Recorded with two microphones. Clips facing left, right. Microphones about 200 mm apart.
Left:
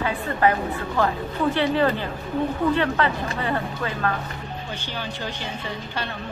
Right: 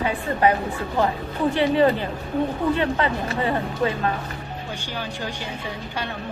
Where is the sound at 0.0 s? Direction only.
20° right (ahead or behind).